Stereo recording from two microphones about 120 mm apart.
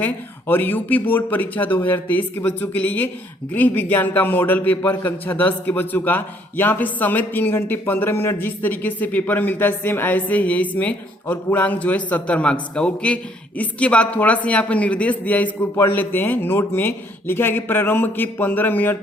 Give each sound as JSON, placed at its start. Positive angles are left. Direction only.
{"t": 0.0, "sound": "a man's voice", "side_deg": 15}